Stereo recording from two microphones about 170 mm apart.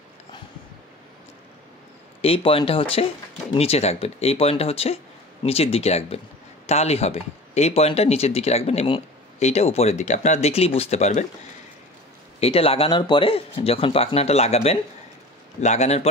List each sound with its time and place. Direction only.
2.2 s speech: 35° left (ahead or behind)
12.4 s speech: 35° left (ahead or behind)